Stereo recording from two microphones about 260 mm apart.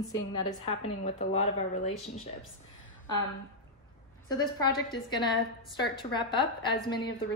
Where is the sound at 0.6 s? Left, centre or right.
Left.